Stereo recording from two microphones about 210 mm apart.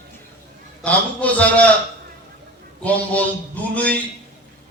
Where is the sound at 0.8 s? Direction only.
5° left (ahead or behind).